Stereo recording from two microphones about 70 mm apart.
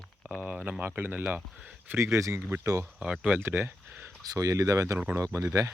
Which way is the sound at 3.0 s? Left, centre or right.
Right.